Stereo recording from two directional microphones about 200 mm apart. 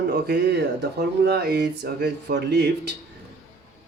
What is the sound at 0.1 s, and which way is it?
Speech, 55° right (ahead or behind).